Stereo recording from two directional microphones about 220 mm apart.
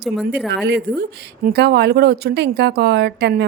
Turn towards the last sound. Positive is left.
turn(degrees=-50)  # may be behind; listen again after turning